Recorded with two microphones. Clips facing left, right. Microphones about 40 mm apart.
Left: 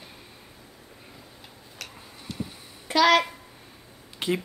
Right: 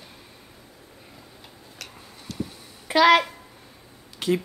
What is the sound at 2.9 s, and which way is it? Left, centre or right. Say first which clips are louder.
Speech: right 3 dB; centre.